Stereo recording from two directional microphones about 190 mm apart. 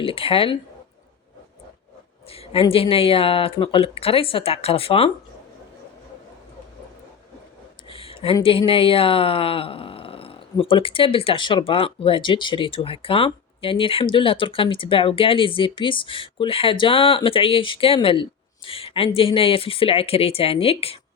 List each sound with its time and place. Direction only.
0.0 s speech: 30° left (ahead or behind)
2.3 s speech: 30° left (ahead or behind)
7.9 s a sound: 30° left (ahead or behind)
8.4 s speech: 30° left (ahead or behind)